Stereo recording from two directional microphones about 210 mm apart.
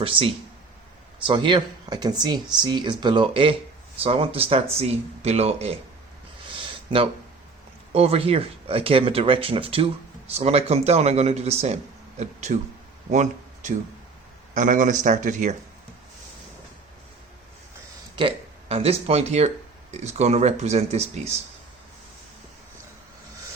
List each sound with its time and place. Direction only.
0.0 s speech: 25° right (ahead or behind)
6.5 s a sound: 25° right (ahead or behind)
7.9 s speech: 30° right (ahead or behind)
18.2 s speech: 25° right (ahead or behind)